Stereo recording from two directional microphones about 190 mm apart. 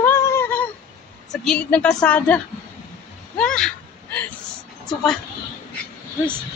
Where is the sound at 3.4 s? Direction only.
5° left (ahead or behind).